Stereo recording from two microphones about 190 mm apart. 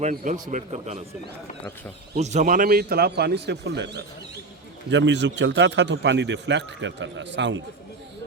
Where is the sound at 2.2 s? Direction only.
35° right (ahead or behind).